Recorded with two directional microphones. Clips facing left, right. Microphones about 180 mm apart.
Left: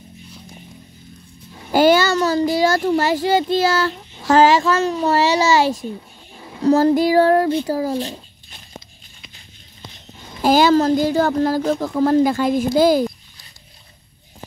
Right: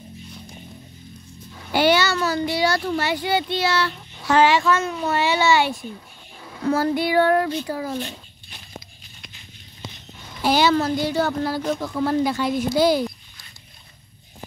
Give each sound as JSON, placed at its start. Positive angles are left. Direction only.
{"t": 1.7, "sound": "speech", "side_deg": 45}
{"t": 10.4, "sound": "a woman's voice", "side_deg": 45}